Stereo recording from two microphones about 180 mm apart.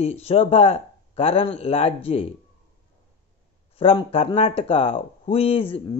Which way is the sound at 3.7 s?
30° left (ahead or behind).